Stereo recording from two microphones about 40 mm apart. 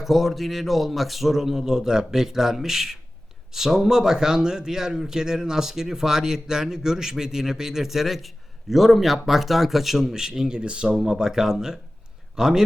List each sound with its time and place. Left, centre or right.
0.0 s a man's voice: centre
10.6 s speech: right
10.9 s a man's voice: centre